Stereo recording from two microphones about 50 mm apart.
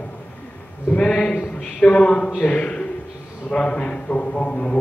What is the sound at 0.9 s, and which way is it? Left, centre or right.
A man's voice, centre.